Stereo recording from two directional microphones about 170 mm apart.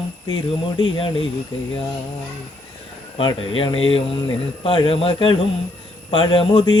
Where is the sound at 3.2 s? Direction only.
30° left (ahead or behind).